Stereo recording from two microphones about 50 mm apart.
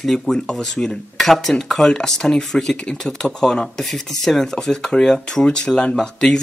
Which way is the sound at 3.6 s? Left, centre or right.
Centre.